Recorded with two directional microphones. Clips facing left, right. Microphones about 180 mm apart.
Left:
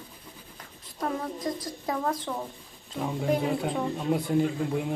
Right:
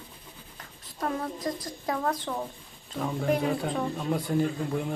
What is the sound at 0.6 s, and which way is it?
Writing, centre (ahead or behind).